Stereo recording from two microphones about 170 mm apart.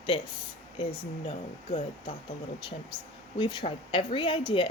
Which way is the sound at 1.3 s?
35° left (ahead or behind).